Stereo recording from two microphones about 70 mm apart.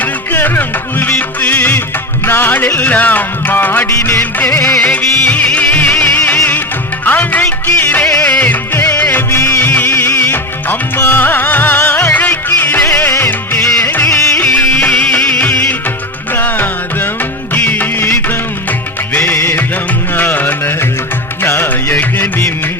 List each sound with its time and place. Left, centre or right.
0.0 s music: left
3.8 s music: left
4.8 s music: left
9.3 s music: left
9.6 s music: left
9.8 s music: left
13.0 s music: left
14.6 s music: left
14.8 s music: left